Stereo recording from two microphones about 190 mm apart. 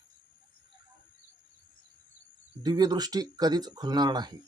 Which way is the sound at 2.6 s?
20° right (ahead or behind).